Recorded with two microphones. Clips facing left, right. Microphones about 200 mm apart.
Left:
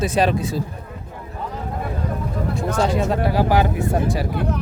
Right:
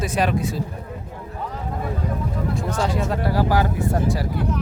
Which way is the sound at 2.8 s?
20° left (ahead or behind).